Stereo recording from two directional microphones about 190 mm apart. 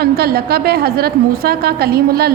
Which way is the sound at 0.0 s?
55° right (ahead or behind).